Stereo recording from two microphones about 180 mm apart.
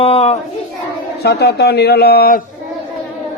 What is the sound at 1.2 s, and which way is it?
Speech, 65° left (ahead or behind).